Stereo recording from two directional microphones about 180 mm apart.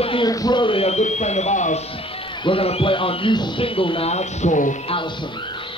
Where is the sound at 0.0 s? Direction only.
30° left (ahead or behind).